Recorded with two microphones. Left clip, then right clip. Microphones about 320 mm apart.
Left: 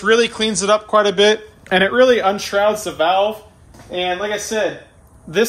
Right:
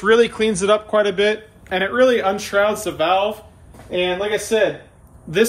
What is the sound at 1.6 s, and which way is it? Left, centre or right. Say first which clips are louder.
Speech: left 6 dB; left.